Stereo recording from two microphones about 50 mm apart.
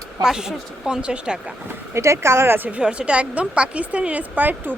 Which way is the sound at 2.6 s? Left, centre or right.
Right.